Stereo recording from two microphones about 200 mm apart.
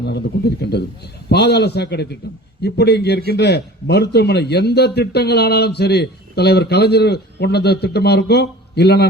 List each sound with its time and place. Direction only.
0.0 s a man's voice: 55° left (ahead or behind)